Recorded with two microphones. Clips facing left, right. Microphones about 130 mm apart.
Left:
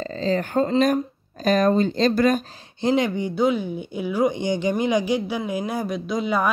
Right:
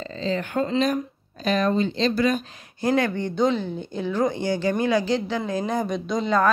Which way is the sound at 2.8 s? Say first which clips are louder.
Left 1 dB; 20° left (ahead or behind).